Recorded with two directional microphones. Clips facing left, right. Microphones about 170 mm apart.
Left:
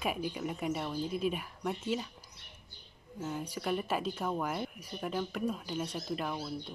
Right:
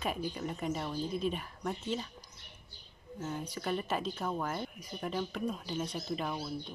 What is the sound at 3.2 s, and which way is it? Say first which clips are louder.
Speech: left 1 dB; 5° left (ahead or behind).